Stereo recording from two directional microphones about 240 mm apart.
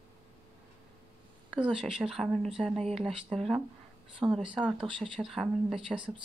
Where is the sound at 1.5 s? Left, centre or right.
Centre.